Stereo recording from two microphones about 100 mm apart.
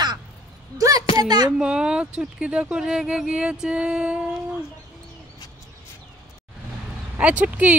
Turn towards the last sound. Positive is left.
turn(degrees=-15)  # may be behind; listen again after turning